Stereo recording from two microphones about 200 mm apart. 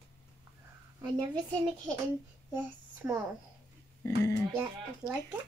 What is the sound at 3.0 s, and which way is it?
Speech, 10° right (ahead or behind).